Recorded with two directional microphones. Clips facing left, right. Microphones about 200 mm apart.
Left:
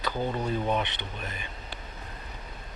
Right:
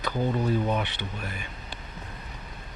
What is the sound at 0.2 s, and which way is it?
Speech, 15° left (ahead or behind).